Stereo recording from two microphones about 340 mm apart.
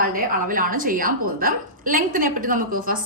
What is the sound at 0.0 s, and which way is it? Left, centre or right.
A woman's voice, right.